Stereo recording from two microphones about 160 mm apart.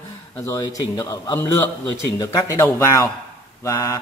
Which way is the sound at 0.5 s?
20° left (ahead or behind).